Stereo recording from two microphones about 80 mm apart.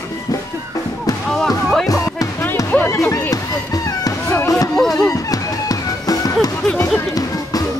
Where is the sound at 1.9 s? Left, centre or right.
Left.